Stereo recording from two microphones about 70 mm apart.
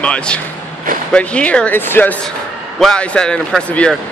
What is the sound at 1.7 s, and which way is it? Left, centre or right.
Speech, left.